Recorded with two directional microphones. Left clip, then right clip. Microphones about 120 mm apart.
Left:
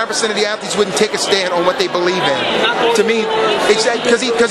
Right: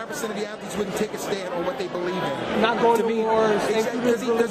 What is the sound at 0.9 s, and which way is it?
Speech, 20° left (ahead or behind).